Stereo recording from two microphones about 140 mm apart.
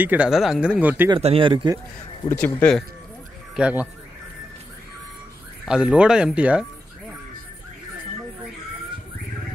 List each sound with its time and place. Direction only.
0.0 s speech: 10° right (ahead or behind)
1.2 s speech: 40° right (ahead or behind)
2.2 s speech: 10° left (ahead or behind)
3.5 s speech: 5° right (ahead or behind)
5.7 s speech: 5° right (ahead or behind)